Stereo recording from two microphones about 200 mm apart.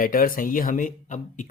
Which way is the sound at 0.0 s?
45° left (ahead or behind).